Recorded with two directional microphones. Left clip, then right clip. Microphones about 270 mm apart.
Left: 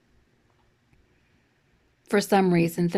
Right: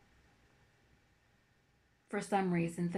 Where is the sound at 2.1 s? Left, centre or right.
Left.